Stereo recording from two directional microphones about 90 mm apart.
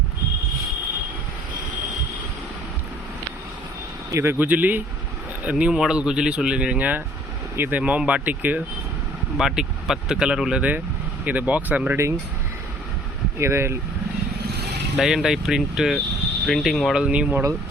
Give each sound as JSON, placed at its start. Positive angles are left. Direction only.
{"t": 4.1, "sound": "speech", "side_deg": -30}
{"t": 9.4, "sound": "speech", "side_deg": -5}
{"t": 13.4, "sound": "speech", "side_deg": -30}
{"t": 14.9, "sound": "speech", "side_deg": -5}